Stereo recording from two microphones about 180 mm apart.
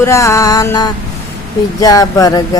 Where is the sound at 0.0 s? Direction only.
15° left (ahead or behind).